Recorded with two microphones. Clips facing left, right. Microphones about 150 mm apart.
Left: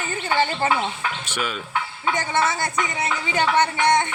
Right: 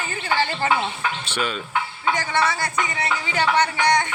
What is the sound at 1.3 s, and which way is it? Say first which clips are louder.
Speech: right 2 dB; 10° left (ahead or behind).